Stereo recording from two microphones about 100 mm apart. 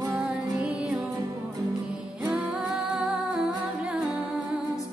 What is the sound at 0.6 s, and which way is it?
Music, 10° right (ahead or behind).